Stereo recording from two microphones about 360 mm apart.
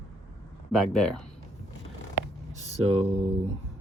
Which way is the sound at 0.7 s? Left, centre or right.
Centre.